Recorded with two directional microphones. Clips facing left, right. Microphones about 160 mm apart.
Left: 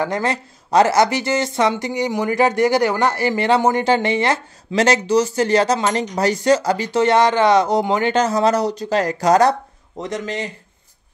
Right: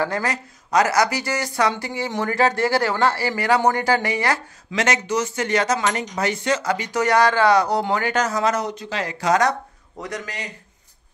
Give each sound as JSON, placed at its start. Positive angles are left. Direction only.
{"t": 0.0, "sound": "speech", "side_deg": 25}